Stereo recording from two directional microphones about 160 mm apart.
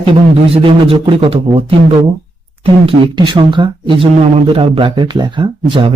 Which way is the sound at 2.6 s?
30° right (ahead or behind).